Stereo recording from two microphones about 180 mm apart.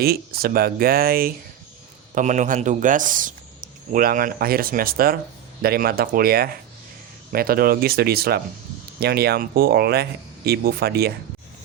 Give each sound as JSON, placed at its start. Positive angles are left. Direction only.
{"t": 0.0, "sound": "speech", "side_deg": -60}
{"t": 2.1, "sound": "speech", "side_deg": -40}